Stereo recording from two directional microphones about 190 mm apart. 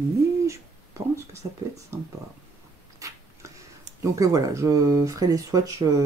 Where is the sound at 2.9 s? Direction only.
15° right (ahead or behind).